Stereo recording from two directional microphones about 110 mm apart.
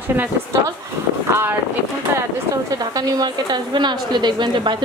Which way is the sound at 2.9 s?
35° right (ahead or behind).